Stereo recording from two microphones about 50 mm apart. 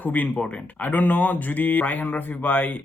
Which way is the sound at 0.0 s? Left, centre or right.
Left.